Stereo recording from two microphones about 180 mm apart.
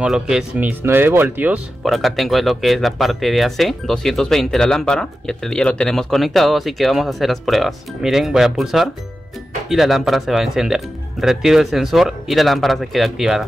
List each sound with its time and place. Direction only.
0.0 s speech: 5° right (ahead or behind)